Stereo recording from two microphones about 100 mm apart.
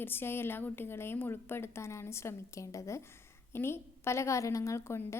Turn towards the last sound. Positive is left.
turn(degrees=25)  # may be behind; listen again after turning